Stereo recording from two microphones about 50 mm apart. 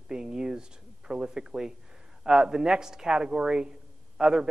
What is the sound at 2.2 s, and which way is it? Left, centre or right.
A man's voice, centre.